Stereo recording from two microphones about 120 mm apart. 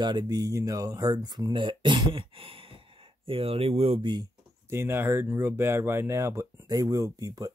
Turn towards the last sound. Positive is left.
turn(degrees=-30)  # may be behind; listen again after turning